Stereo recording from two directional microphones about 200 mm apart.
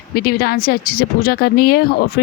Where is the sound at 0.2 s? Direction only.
50° left (ahead or behind).